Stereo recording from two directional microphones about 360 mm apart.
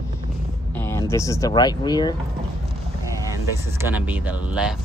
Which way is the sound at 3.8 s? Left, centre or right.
Centre.